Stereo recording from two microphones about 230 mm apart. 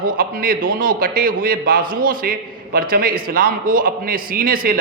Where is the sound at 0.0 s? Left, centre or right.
Right.